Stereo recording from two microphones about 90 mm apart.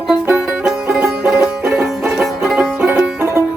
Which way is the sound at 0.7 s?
10° right (ahead or behind).